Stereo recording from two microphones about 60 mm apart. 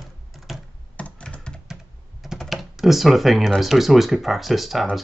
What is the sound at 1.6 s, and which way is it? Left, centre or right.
Computer keyboard, centre.